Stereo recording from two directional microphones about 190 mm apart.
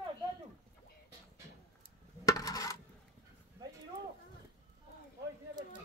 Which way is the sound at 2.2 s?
20° left (ahead or behind).